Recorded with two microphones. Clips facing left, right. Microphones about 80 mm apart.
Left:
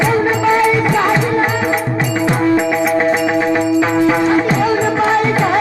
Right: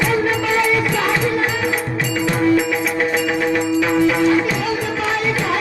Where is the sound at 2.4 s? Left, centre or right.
Left.